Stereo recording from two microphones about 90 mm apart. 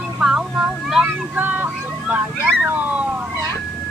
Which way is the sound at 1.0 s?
20° right (ahead or behind).